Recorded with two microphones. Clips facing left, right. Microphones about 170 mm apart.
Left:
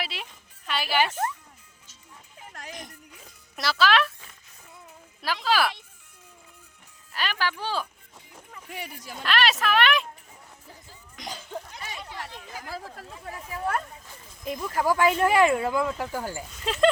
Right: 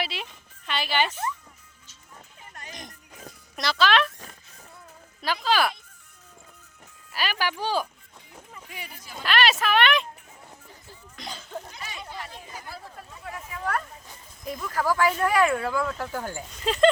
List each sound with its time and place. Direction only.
0.0 s a woman's voice: centre (ahead or behind)
3.5 s a child's voice: 5° left (ahead or behind)
5.2 s speech: centre (ahead or behind)
7.1 s speech: 5° right (ahead or behind)
8.7 s speech: 65° left (ahead or behind)
9.2 s speech: centre (ahead or behind)
11.2 s a sound: 15° left (ahead or behind)
12.5 s speech: 90° left
13.2 s speech: 30° left (ahead or behind); by 16.9 s centre (ahead or behind)